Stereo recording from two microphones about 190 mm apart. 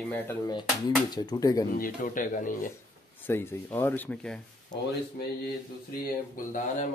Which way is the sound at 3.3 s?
10° left (ahead or behind).